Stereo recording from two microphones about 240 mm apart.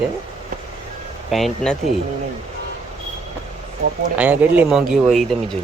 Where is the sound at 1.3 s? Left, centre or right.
Centre.